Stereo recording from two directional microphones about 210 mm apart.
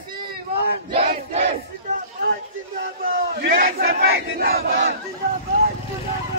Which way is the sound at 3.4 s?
45° right (ahead or behind).